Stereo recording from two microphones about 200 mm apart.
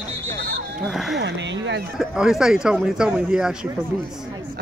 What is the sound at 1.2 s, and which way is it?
Speech, 60° right (ahead or behind).